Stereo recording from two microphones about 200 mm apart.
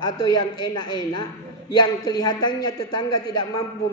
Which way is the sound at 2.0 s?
20° left (ahead or behind).